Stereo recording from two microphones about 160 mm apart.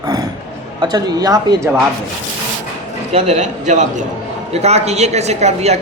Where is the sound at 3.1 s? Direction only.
45° right (ahead or behind).